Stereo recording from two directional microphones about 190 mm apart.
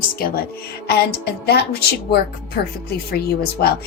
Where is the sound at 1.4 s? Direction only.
60° left (ahead or behind).